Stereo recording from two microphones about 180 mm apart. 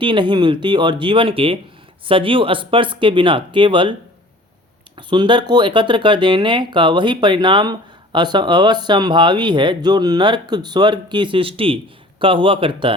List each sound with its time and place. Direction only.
0.0 s speech: 25° right (ahead or behind)
4.9 s speech: 25° right (ahead or behind)